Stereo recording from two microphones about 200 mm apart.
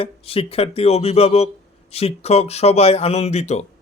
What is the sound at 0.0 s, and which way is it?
Speech, 30° left (ahead or behind).